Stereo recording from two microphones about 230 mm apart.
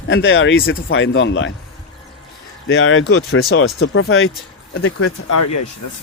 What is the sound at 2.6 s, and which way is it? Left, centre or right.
Speech, left.